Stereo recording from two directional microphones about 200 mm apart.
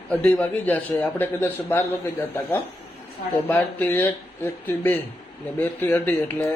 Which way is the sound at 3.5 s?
10° left (ahead or behind).